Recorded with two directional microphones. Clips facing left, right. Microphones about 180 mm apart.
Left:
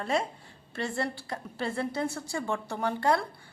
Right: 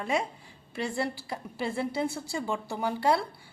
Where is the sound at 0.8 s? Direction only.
20° right (ahead or behind).